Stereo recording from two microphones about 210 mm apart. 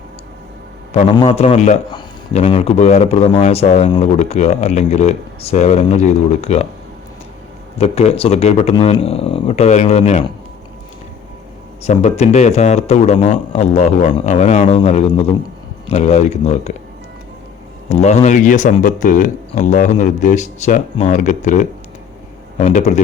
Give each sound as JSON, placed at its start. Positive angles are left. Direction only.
{"t": 1.0, "sound": "speech", "side_deg": 25}
{"t": 7.8, "sound": "speech", "side_deg": 30}
{"t": 11.8, "sound": "speech", "side_deg": 30}
{"t": 15.9, "sound": "speech", "side_deg": 30}
{"t": 17.8, "sound": "speech", "side_deg": 35}